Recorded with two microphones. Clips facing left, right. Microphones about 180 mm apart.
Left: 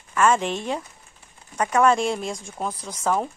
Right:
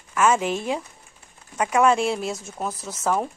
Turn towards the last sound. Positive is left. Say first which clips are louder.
# even
turn(degrees=-5)  # may be behind; listen again after turning